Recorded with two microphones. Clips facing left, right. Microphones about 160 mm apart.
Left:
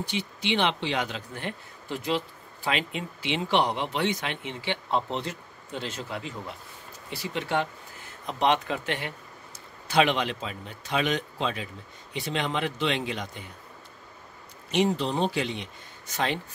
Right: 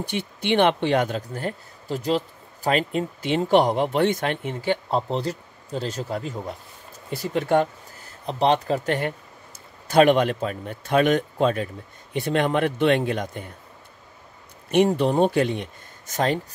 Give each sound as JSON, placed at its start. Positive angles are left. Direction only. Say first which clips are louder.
{"t": 0.0, "sound": "speech", "louder": "right 3 dB", "side_deg": -55}
{"t": 14.7, "sound": "speech", "louder": "right 6 dB", "side_deg": -55}